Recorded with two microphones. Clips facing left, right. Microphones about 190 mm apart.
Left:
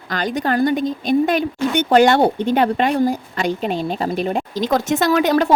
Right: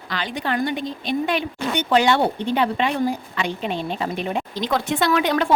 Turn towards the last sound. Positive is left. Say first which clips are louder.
# left 4 dB
turn(degrees=40)  # may be behind; listen again after turning